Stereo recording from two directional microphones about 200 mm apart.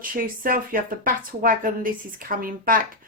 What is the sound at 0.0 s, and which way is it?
A woman's voice, 45° right (ahead or behind).